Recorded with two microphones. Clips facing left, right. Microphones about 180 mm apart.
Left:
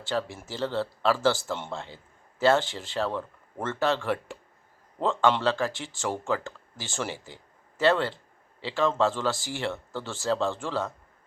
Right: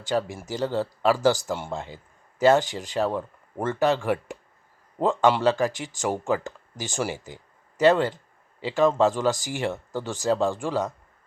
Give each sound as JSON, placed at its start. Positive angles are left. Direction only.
{"t": 0.0, "sound": "speech", "side_deg": -15}